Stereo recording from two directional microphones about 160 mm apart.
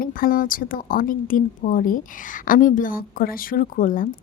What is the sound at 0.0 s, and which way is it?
Speech, 60° left (ahead or behind).